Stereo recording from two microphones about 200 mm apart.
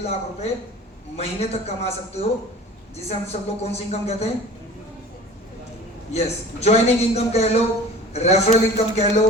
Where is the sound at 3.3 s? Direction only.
30° left (ahead or behind).